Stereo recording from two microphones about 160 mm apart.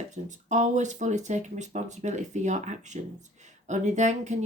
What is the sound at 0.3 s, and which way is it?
Speech, 50° right (ahead or behind).